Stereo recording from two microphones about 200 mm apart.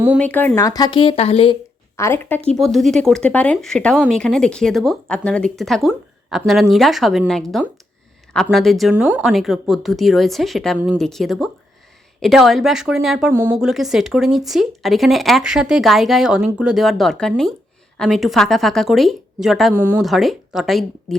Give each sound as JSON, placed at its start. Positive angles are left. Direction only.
{"t": 0.2, "sound": "speech", "side_deg": 10}
{"t": 2.0, "sound": "speech", "side_deg": 10}
{"t": 2.6, "sound": "speech", "side_deg": 0}
{"t": 8.4, "sound": "speech", "side_deg": 0}
{"t": 13.7, "sound": "speech", "side_deg": 0}
{"t": 19.7, "sound": "speech", "side_deg": -10}
{"t": 20.1, "sound": "speech", "side_deg": 0}